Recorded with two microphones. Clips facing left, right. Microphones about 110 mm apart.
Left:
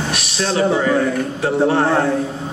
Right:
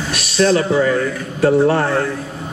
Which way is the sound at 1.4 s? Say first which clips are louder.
Right 4 dB; 55° right (ahead or behind).